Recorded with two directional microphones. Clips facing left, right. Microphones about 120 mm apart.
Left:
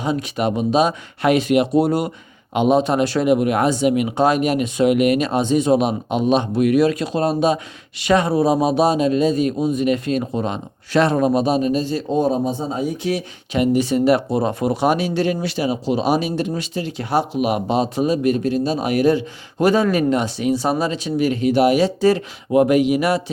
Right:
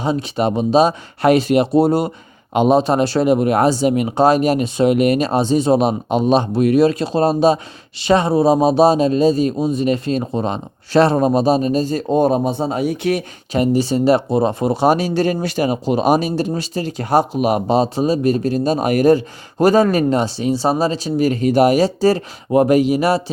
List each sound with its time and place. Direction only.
0.0 s speech: 30° right (ahead or behind); by 13.2 s 60° right (ahead or behind)
13.5 s speech: 35° right (ahead or behind)